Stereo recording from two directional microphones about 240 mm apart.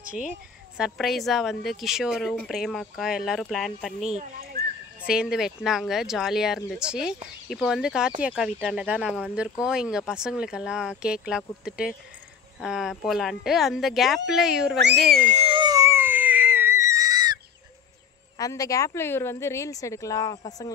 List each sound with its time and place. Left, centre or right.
0.7 s speech: centre
4.2 s speech: right
5.0 s speech: centre
15.2 s a sound: right
18.4 s speech: centre